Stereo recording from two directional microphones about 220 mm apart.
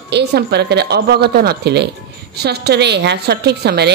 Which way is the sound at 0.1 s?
50° right (ahead or behind).